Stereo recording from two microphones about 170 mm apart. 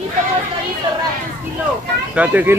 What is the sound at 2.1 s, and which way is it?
Speech, 10° right (ahead or behind).